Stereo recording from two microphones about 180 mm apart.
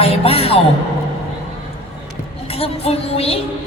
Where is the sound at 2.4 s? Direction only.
35° left (ahead or behind).